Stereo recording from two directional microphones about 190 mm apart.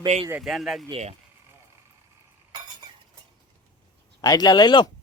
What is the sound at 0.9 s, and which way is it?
Speech, 35° right (ahead or behind).